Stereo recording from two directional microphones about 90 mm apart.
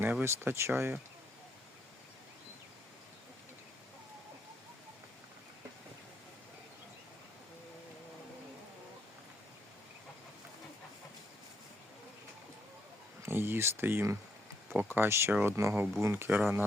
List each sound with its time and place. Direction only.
0.0 s speech: 20° right (ahead or behind)
13.2 s a sound: 25° right (ahead or behind)
14.8 s speech: 25° right (ahead or behind)